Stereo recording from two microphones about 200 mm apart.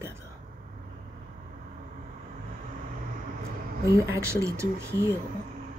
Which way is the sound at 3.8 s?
15° right (ahead or behind).